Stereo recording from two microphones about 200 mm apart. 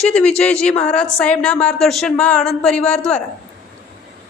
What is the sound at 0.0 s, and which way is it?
Speech, 5° left (ahead or behind).